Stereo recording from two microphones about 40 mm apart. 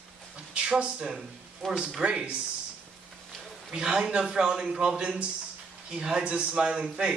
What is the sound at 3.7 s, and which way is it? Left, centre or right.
A man's voice, centre.